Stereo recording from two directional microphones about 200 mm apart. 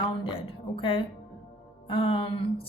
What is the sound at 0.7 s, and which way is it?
A woman's voice, 25° left (ahead or behind).